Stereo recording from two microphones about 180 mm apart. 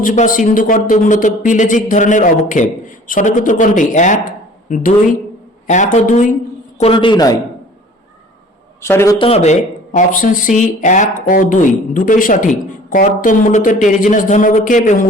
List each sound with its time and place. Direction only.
0.0 s speech: 45° left (ahead or behind)
6.7 s a man's voice: 30° left (ahead or behind)
8.8 s a man's voice: 15° left (ahead or behind)
9.1 s speech: 30° left (ahead or behind)